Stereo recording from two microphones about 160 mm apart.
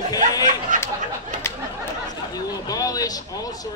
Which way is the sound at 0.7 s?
55° right (ahead or behind).